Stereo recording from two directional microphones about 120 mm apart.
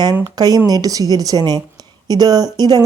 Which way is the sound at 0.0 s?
35° right (ahead or behind).